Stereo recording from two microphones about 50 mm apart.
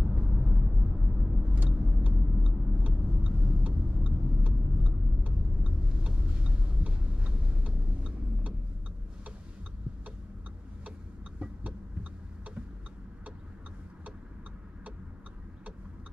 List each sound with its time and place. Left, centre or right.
0.1 s vehicle: right
11.3 s vehicle: right